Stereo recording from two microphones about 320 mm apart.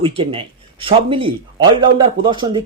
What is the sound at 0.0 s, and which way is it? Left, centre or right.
Speech, centre.